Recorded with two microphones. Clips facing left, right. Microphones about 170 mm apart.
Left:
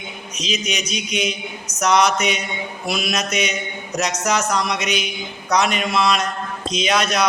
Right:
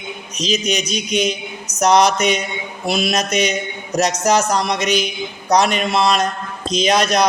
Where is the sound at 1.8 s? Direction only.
35° right (ahead or behind).